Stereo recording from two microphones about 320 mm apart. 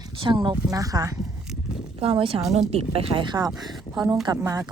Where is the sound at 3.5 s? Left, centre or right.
Centre.